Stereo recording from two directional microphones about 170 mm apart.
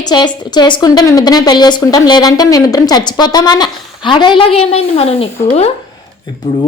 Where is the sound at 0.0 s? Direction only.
25° left (ahead or behind).